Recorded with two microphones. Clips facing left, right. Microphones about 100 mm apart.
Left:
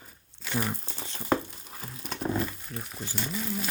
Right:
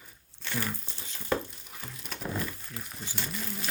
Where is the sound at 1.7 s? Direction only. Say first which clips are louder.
Left 4 dB; 35° left (ahead or behind).